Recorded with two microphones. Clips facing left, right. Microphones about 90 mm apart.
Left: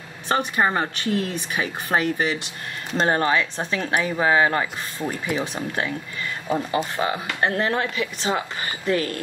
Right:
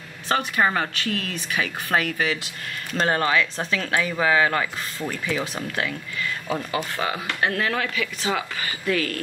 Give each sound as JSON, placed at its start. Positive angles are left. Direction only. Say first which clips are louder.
{"t": 0.3, "sound": "speech", "louder": "left 1 dB", "side_deg": 20}